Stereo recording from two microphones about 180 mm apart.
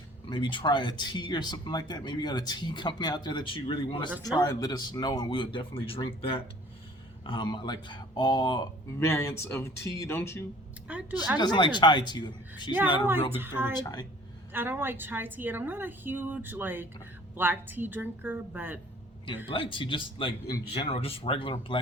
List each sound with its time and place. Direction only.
0.3 s speech: 25° left (ahead or behind)
11.3 s speech: 25° left (ahead or behind)
13.3 s a woman's voice: 10° right (ahead or behind)
13.8 s speech: 25° left (ahead or behind)
14.5 s a woman's voice: 10° right (ahead or behind)
19.5 s speech: 30° left (ahead or behind)